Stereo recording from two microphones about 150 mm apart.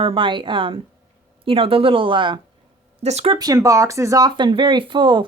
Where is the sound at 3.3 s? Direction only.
25° right (ahead or behind).